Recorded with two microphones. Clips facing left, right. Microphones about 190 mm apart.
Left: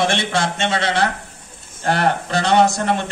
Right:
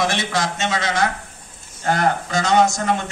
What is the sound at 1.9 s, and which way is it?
Speech, 65° left (ahead or behind).